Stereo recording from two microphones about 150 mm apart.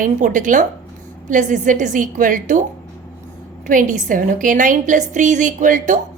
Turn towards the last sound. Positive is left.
turn(degrees=-60)  # may be behind; listen again after turning